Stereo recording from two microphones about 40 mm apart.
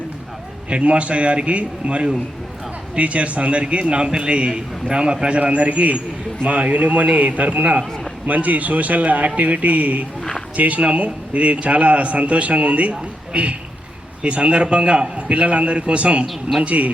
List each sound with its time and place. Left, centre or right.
0.7 s a man's voice: right
5.4 s a man's voice: right